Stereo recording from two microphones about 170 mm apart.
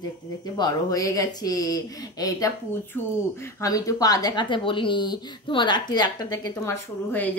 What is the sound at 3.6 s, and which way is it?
Speech, 20° left (ahead or behind).